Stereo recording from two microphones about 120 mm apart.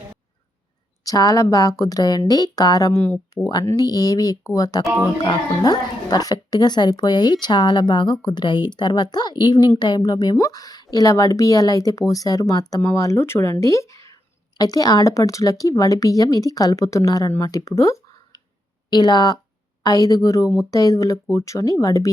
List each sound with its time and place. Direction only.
1.0 s a woman's voice: 30° left (ahead or behind)
3.0 s speech: 15° left (ahead or behind)
3.4 s a woman's voice: 35° left (ahead or behind)
18.9 s a woman's voice: 35° left (ahead or behind)